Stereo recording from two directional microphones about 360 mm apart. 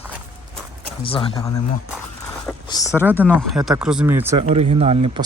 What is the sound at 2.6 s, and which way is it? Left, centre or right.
Speech, centre.